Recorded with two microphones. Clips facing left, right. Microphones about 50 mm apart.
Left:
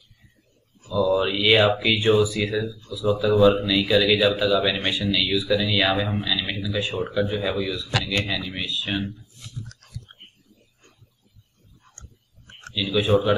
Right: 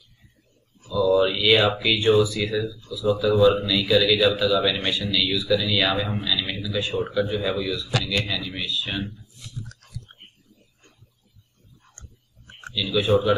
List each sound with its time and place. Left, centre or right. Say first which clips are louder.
0.8 s speech: right 2 dB; centre
8.3 s speech: even; centre
12.7 s speech: even; centre